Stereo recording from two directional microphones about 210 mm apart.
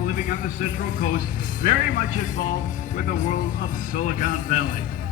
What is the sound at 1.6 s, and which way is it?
Speech, 40° left (ahead or behind).